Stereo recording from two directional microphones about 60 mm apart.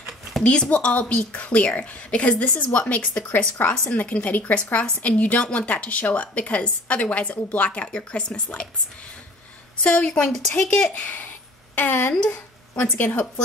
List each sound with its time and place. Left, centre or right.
0.4 s a woman's voice: centre
9.8 s a woman's voice: left
11.7 s a woman's voice: left